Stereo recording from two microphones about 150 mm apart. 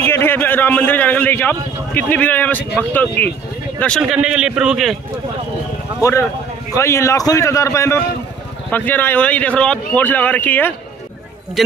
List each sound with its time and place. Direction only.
0.0 s a man's voice: 15° left (ahead or behind)
4.0 s a man's voice: 5° right (ahead or behind)
6.7 s a man's voice: 20° left (ahead or behind)